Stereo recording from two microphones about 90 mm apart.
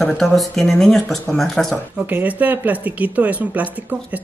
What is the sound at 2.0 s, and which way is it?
Speech, 20° right (ahead or behind).